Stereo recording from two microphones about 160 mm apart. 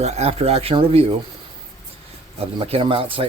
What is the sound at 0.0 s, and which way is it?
Speech, 40° right (ahead or behind).